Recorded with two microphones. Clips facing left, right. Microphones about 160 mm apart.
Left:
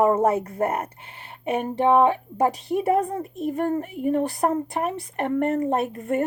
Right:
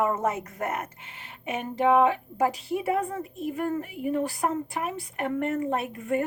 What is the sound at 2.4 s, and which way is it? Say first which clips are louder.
Speech: left 4 dB; 40° left (ahead or behind).